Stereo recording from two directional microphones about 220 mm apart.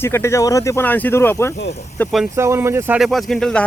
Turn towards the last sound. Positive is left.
turn(degrees=5)  # may be behind; listen again after turning